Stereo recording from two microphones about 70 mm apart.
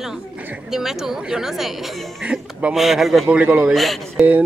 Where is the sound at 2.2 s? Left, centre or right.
Centre.